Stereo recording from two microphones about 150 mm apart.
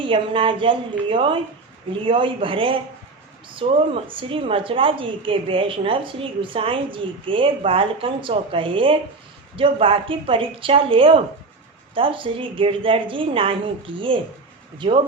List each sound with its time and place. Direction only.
0.0 s a woman's voice: 35° right (ahead or behind)